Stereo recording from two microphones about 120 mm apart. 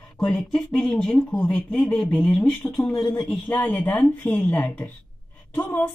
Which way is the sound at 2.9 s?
20° left (ahead or behind).